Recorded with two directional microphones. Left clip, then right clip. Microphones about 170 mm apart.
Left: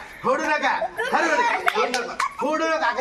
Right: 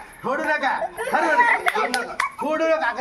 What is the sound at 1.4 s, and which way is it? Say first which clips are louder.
Speech: right 2 dB; 40° left (ahead or behind).